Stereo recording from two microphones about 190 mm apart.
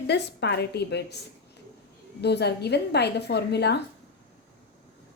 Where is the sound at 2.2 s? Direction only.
60° left (ahead or behind).